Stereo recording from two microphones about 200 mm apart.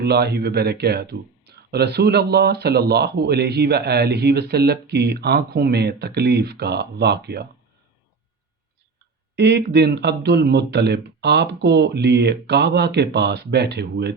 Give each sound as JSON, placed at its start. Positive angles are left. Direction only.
{"t": 0.0, "sound": "speech", "side_deg": -55}
{"t": 9.3, "sound": "speech", "side_deg": -55}